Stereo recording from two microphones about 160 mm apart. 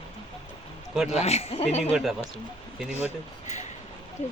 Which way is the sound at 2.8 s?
10° right (ahead or behind).